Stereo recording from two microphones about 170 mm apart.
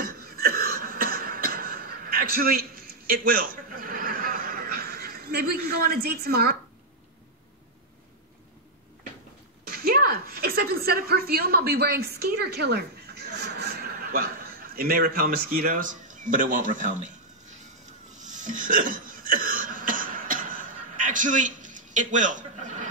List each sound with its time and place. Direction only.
0.2 s a sound: 60° right (ahead or behind)
9.7 s a woman's voice: 60° right (ahead or behind)
18.2 s hiccup: 50° right (ahead or behind)